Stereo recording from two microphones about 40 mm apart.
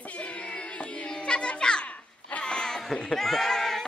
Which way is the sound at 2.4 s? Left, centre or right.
Left.